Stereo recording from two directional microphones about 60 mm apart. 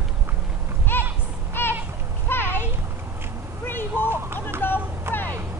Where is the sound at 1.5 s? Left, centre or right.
Left.